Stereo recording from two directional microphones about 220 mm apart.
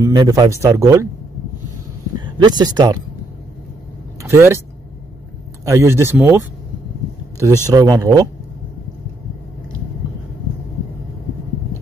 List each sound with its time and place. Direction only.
0.0 s speech: 15° right (ahead or behind)
2.1 s speech: 20° right (ahead or behind)
4.2 s speech: 10° right (ahead or behind)
5.7 s speech: 10° right (ahead or behind)
7.3 s speech: 15° right (ahead or behind)